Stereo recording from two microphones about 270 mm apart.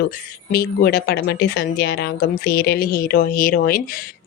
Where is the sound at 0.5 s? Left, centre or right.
Left.